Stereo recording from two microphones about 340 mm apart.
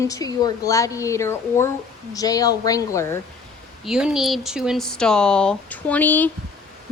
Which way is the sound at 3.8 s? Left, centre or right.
Centre.